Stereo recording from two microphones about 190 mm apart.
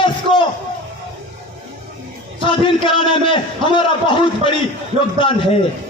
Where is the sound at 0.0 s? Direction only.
25° left (ahead or behind).